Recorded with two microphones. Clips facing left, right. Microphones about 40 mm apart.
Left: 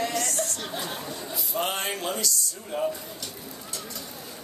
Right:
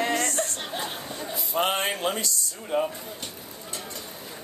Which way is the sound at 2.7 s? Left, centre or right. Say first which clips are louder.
Right 3 dB; right.